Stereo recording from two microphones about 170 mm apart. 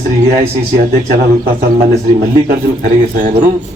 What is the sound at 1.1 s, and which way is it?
A man's voice, 55° right (ahead or behind).